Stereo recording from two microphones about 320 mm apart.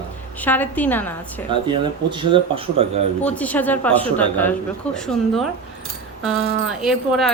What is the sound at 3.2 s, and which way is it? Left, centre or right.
Speech, centre.